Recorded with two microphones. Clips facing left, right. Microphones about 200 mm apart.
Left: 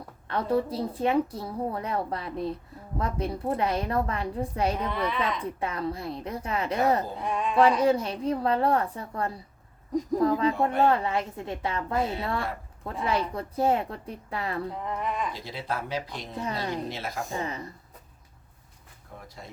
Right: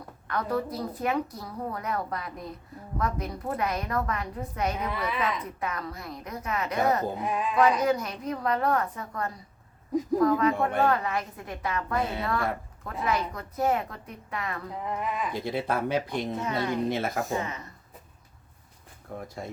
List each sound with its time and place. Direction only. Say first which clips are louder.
0.3 s a woman's voice: left 3 dB; 30° left (ahead or behind)
4.9 s speech: left 2 dB; 5° right (ahead or behind)
5.5 s a woman's voice: left 4 dB; 30° left (ahead or behind)
7.2 s speech: even; 5° right (ahead or behind)
7.8 s a woman's voice: left 3 dB; 30° left (ahead or behind)
14.7 s speech: even; 5° right (ahead or behind)
15.3 s speech: right 5 dB; 55° right (ahead or behind)
16.4 s speech: left 2 dB; 30° left (ahead or behind)
16.9 s speech: right 6 dB; 50° right (ahead or behind)
17.3 s speech: right 1 dB; 30° left (ahead or behind)
19.1 s speech: right 8 dB; 55° right (ahead or behind)